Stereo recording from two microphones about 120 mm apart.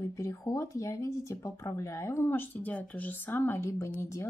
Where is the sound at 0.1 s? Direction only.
25° left (ahead or behind).